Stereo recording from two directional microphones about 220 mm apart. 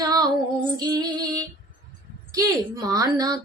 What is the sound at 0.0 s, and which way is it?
Female singing, 15° right (ahead or behind).